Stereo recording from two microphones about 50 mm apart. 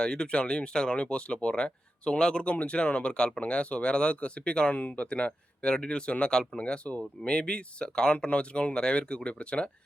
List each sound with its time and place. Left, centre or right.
0.0 s speech: centre
4.7 s speech: left